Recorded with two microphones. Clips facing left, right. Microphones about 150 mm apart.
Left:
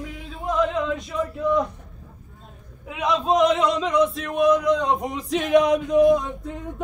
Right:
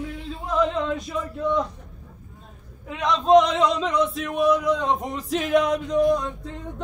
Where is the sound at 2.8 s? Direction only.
5° left (ahead or behind).